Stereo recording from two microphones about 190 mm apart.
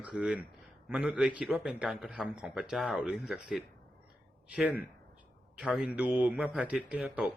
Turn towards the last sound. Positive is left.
turn(degrees=-5)  # may be behind; listen again after turning